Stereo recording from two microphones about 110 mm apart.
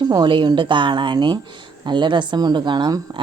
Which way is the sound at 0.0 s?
40° right (ahead or behind).